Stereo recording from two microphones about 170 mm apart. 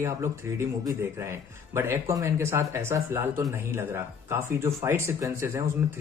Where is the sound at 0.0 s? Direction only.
15° right (ahead or behind).